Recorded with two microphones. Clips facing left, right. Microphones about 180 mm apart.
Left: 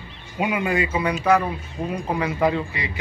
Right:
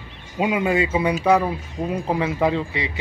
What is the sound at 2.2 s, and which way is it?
Speech, 20° right (ahead or behind).